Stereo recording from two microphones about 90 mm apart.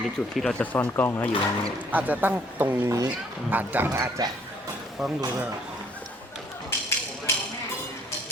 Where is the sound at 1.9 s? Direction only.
20° right (ahead or behind).